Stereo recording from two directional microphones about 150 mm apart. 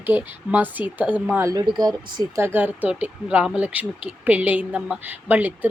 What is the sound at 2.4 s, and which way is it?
Speech, 15° right (ahead or behind).